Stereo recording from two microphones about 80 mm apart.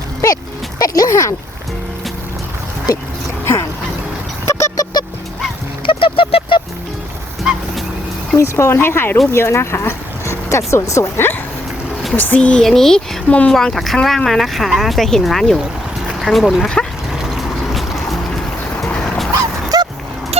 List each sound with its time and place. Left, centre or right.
0.8 s speech: left
3.4 s a sound: left
4.4 s vehicle: left
5.8 s a sound: left
8.4 s speech: left
12.1 s speech: left; by 13.0 s centre
13.2 s speech: centre
13.5 s speech: centre
17.1 s a sound: centre
18.9 s dog: centre
19.7 s dog: right